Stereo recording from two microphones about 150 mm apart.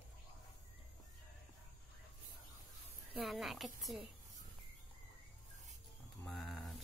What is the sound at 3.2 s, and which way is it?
Speech, centre (ahead or behind).